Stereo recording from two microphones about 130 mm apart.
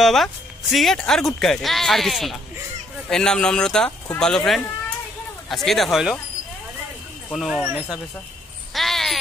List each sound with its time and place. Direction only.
0.0 s speech: centre (ahead or behind)
7.3 s speech: centre (ahead or behind)
8.7 s a sound: centre (ahead or behind)